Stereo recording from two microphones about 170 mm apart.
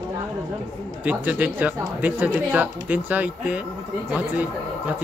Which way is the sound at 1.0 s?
10° right (ahead or behind).